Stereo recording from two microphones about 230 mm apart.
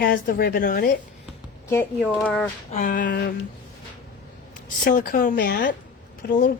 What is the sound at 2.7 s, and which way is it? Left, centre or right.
Speech, left.